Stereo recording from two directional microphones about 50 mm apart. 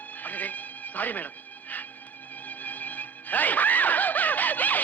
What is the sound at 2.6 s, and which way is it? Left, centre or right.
Music, left.